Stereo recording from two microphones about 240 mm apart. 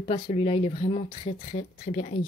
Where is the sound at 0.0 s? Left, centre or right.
Left.